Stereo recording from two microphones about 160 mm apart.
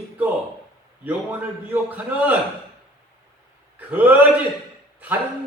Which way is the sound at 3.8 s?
10° right (ahead or behind).